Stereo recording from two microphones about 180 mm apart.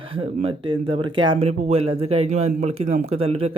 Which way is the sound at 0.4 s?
30° right (ahead or behind).